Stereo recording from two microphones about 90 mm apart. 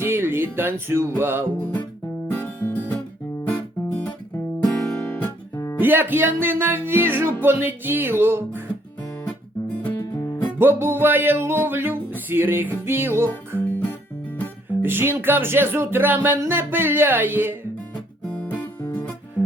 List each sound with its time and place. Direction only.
0.0 s music: 25° right (ahead or behind)
2.2 s music: 20° left (ahead or behind)
3.4 s guitar: 15° left (ahead or behind)
4.6 s music: 10° left (ahead or behind)
5.8 s music: 20° right (ahead or behind)
9.2 s guitar: 15° left (ahead or behind)
10.6 s music: 25° right (ahead or behind)
13.6 s music: 20° left (ahead or behind)
14.8 s music: 25° right (ahead or behind)
18.3 s music: 20° left (ahead or behind)